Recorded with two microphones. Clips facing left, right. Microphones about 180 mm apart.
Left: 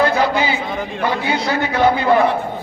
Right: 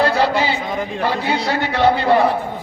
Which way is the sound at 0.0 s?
35° right (ahead or behind).